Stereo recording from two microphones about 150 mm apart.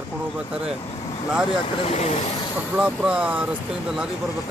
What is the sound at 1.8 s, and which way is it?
Speech, 45° left (ahead or behind).